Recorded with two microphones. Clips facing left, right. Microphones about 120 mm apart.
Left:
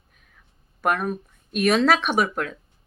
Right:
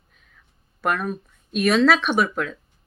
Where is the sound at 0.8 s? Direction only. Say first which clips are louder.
Left 1 dB; 45° left (ahead or behind).